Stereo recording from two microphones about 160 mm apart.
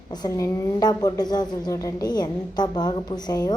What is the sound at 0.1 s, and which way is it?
A woman's voice, 25° left (ahead or behind).